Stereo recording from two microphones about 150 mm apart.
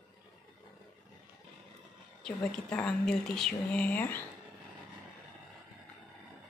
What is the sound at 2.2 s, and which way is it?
Speech, 5° left (ahead or behind).